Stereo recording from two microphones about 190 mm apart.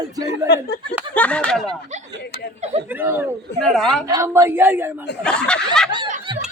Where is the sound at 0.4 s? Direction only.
60° left (ahead or behind).